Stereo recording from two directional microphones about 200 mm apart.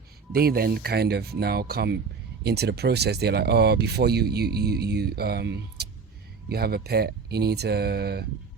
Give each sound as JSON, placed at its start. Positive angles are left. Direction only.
{"t": 0.3, "sound": "speech", "side_deg": -50}